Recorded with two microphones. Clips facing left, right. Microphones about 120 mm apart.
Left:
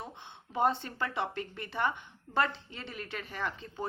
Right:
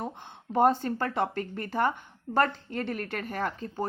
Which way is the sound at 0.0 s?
45° right (ahead or behind).